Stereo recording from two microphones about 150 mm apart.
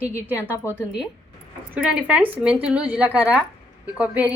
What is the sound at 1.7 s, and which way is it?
A woman's voice, 5° right (ahead or behind).